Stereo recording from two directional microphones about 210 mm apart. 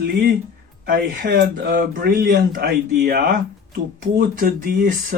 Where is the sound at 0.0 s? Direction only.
50° right (ahead or behind).